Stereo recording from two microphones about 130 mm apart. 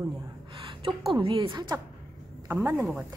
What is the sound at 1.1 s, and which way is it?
Speech, 40° right (ahead or behind).